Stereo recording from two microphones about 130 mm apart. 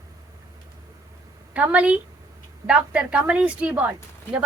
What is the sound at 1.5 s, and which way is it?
Speech, 10° right (ahead or behind).